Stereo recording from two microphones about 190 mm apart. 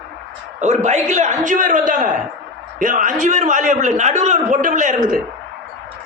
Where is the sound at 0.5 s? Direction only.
40° right (ahead or behind).